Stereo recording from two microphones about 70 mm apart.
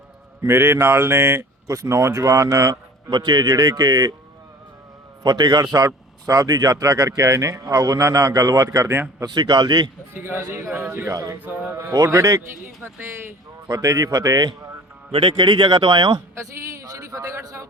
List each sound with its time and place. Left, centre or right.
0.4 s speech: right
1.6 s a man's voice: right
2.6 s speech: right
5.2 s a man's voice: right
9.2 s speech: right
10.2 s speech: right
11.1 s a man's voice: right
11.4 s speech: right
11.9 s a man's voice: right
13.7 s a man's voice: right
15.7 s speech: right
16.3 s a sound: right
16.8 s a sound: right